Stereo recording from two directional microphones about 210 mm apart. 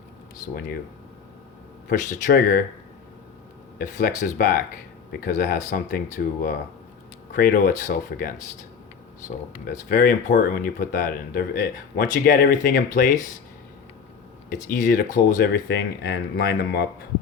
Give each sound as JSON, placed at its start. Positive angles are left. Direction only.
{"t": 1.9, "sound": "speech", "side_deg": 40}
{"t": 3.8, "sound": "speech", "side_deg": 40}
{"t": 9.6, "sound": "speech", "side_deg": 40}
{"t": 14.5, "sound": "speech", "side_deg": 40}